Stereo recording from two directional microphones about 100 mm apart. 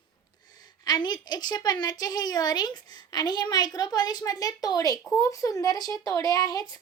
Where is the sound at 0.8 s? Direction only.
45° left (ahead or behind).